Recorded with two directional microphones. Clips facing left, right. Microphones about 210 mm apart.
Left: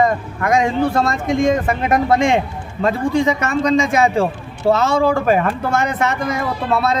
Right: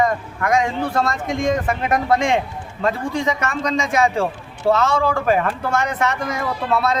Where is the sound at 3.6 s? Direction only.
25° left (ahead or behind).